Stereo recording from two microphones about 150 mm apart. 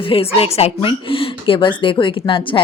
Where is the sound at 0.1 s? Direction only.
40° left (ahead or behind).